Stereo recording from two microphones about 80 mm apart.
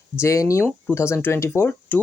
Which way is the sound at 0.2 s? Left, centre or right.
Left.